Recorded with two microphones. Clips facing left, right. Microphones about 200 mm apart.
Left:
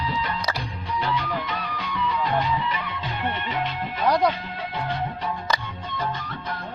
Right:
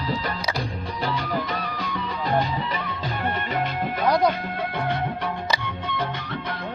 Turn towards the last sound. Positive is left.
turn(degrees=-70)  # may be behind; listen again after turning